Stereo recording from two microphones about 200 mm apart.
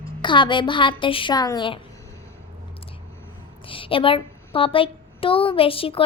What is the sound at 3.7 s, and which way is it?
A woman's voice, 25° left (ahead or behind).